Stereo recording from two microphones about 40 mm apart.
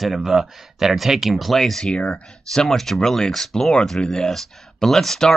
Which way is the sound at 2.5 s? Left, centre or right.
Centre.